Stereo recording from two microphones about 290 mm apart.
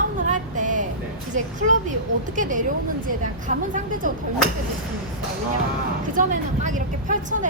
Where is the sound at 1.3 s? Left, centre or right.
Right.